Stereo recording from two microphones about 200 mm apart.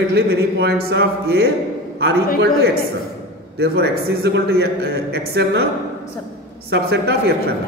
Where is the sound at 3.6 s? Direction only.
55° right (ahead or behind).